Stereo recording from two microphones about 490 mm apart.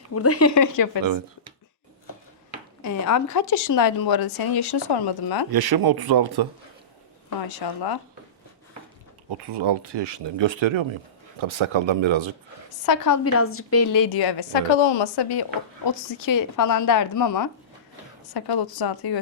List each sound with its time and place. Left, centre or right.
0.1 s speech: left
2.8 s speech: left
5.5 s speech: right
7.4 s speech: left
9.4 s speech: right
12.8 s speech: left
13.2 s speech: left
13.9 s speech: left